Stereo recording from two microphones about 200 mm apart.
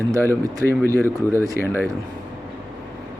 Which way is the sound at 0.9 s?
15° right (ahead or behind).